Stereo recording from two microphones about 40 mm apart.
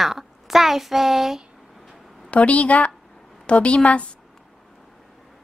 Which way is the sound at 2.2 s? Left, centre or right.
Left.